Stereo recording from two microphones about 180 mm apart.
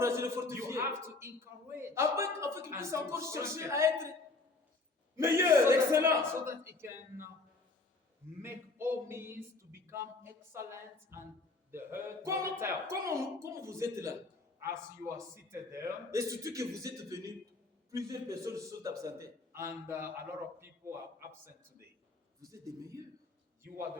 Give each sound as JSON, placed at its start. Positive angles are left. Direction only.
{"t": 0.0, "sound": "a man's voice", "side_deg": -15}
{"t": 5.1, "sound": "a man's voice", "side_deg": -15}
{"t": 8.4, "sound": "a sound", "side_deg": -15}
{"t": 11.7, "sound": "a man's voice", "side_deg": -15}
{"t": 22.4, "sound": "speech", "side_deg": -20}